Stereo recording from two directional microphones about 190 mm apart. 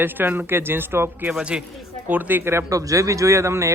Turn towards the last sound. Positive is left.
turn(degrees=-15)  # may be behind; listen again after turning